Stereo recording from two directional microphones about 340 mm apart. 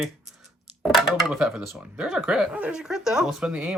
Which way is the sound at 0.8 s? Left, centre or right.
Centre.